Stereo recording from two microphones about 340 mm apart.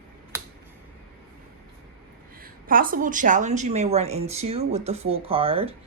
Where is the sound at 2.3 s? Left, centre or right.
Right.